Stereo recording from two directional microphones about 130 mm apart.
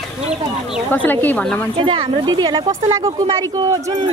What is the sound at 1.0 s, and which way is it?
Speech, 10° left (ahead or behind).